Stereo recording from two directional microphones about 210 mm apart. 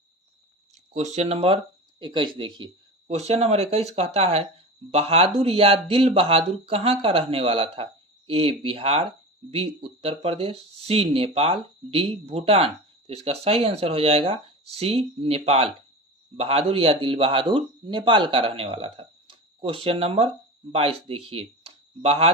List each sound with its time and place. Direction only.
1.1 s speech: 30° right (ahead or behind)